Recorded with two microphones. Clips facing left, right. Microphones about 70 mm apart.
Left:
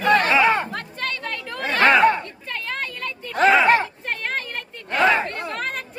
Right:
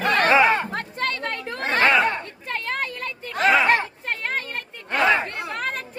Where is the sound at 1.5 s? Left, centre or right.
Right.